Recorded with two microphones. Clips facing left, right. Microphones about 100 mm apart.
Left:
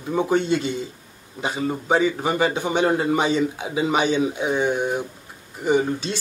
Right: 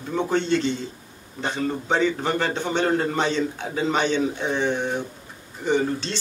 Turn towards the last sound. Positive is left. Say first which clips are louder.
# left 2 dB
turn(degrees=10)  # may be behind; listen again after turning